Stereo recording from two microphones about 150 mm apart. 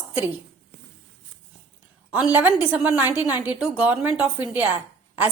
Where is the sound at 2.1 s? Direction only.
10° right (ahead or behind).